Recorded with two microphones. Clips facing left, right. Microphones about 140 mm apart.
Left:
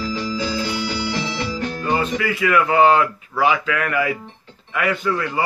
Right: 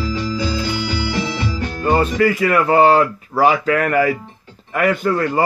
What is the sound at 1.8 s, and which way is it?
A man's voice, 45° right (ahead or behind).